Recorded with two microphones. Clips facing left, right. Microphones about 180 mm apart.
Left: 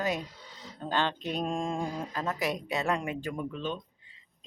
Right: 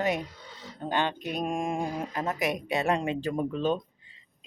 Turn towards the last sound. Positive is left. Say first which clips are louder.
# right 7 dB
turn(degrees=-40)  # may be behind; listen again after turning